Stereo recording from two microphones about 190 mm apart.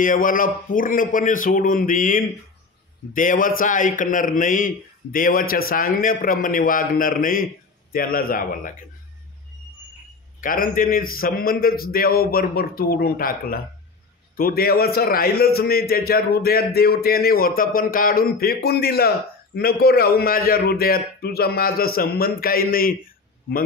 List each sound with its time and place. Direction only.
0.0 s a man's voice: 45° left (ahead or behind)
10.4 s a man's voice: 45° left (ahead or behind)